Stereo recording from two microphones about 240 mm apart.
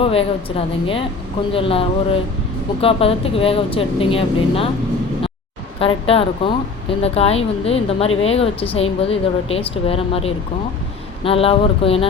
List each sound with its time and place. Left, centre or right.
0.0 s a woman's voice: left
5.8 s a woman's voice: left